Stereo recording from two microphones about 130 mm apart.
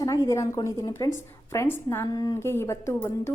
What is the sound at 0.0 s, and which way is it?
Speech, 25° left (ahead or behind).